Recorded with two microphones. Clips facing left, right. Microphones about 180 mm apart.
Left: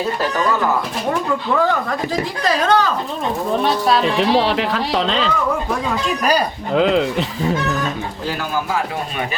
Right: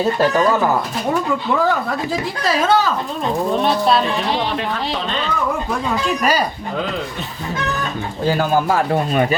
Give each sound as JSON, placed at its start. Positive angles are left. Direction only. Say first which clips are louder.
{"t": 2.4, "sound": "speech", "louder": "even", "side_deg": -5}
{"t": 4.2, "sound": "speech", "louder": "left 5 dB", "side_deg": 90}
{"t": 6.7, "sound": "speech", "louder": "left 10 dB", "side_deg": 90}